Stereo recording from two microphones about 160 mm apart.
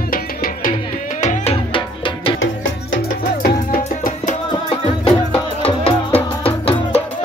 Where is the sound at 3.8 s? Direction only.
50° left (ahead or behind).